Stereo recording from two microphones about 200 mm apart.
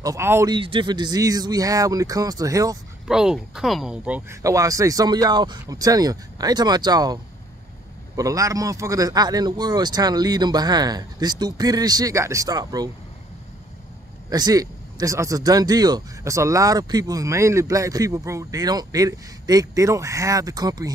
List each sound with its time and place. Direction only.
0.0 s speech: 15° right (ahead or behind)
0.6 s speech: 25° right (ahead or behind)
3.1 s speech: 5° right (ahead or behind); by 7.2 s 20° right (ahead or behind)
8.2 s speech: 15° right (ahead or behind)
14.3 s speech: 20° right (ahead or behind)